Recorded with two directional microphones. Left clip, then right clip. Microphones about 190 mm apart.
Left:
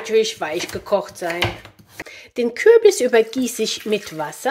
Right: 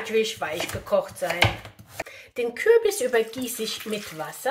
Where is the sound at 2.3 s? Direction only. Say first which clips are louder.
Left 7 dB; 50° left (ahead or behind).